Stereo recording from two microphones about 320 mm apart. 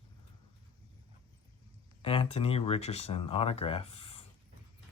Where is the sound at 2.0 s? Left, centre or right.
Centre.